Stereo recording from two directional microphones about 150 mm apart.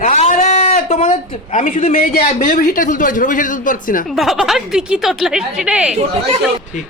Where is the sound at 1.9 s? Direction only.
75° left (ahead or behind).